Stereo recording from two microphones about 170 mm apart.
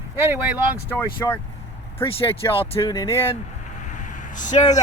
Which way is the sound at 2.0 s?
35° left (ahead or behind).